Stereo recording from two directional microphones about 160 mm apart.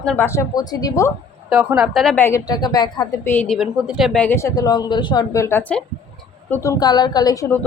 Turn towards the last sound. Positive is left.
turn(degrees=20)  # may be behind; listen again after turning